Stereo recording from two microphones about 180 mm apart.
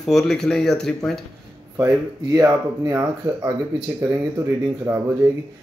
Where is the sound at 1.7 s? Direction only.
15° right (ahead or behind).